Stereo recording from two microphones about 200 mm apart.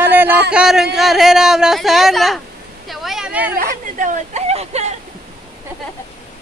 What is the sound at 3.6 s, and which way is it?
Speech, 40° right (ahead or behind).